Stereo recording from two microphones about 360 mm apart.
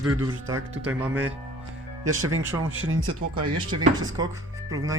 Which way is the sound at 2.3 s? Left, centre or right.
Right.